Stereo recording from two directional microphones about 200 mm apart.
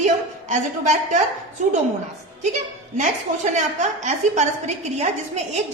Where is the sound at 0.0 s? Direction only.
35° right (ahead or behind).